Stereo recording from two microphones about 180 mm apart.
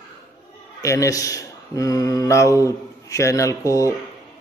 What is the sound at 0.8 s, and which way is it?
Speech, 15° left (ahead or behind).